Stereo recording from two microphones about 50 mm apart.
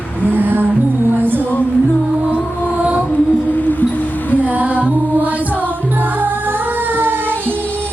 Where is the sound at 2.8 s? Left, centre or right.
Centre.